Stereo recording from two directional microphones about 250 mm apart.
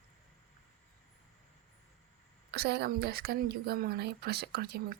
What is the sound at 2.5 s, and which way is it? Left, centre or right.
A woman's voice, right.